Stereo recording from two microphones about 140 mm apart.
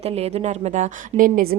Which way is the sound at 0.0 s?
45° right (ahead or behind).